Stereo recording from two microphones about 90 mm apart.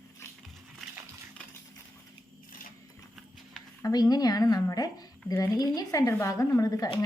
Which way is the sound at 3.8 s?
45° left (ahead or behind).